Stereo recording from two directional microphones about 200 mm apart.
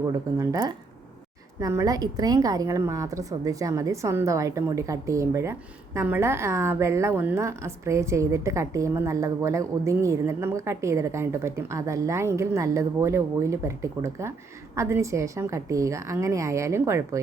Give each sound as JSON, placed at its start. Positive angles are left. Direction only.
{"t": 0.3, "sound": "a woman's voice", "side_deg": -15}